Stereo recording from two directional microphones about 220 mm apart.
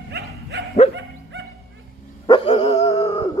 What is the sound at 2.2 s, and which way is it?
Dog, 25° left (ahead or behind).